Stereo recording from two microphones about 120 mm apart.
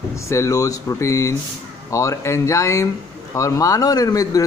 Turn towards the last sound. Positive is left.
turn(degrees=30)  # may be behind; listen again after turning